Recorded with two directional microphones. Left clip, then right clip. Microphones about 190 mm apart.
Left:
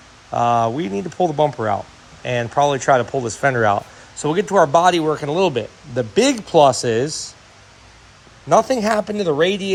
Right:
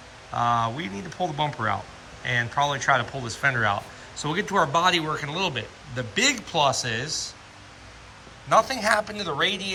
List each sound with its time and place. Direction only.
0.3 s speech: 15° left (ahead or behind); by 7.3 s 35° left (ahead or behind)
8.4 s speech: 35° left (ahead or behind)